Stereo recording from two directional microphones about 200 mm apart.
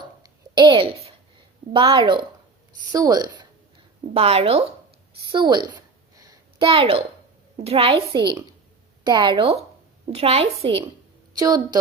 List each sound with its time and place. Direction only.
0.5 s a woman's voice: 25° right (ahead or behind)
4.1 s a woman's voice: 30° right (ahead or behind)
6.1 s a sound: 20° right (ahead or behind)
6.7 s a woman's voice: 30° right (ahead or behind)
11.3 s a woman's voice: 20° right (ahead or behind)